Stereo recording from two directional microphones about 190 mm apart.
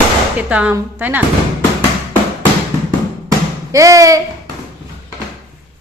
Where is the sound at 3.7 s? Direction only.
15° right (ahead or behind).